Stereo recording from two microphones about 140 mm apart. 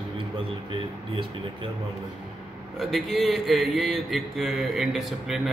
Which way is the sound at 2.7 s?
Centre (ahead or behind).